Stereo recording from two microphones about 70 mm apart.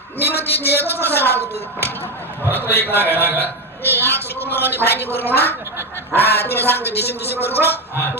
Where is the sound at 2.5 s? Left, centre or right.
Left.